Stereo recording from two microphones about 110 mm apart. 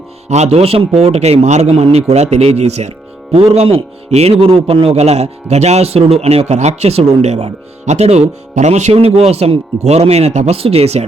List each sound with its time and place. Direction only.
0.3 s speech: 85° right
3.3 s speech: 65° right (ahead or behind)